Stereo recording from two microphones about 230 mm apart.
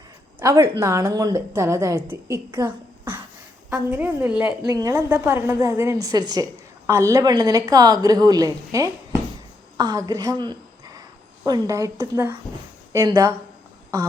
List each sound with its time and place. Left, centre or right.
0.3 s a woman's voice: centre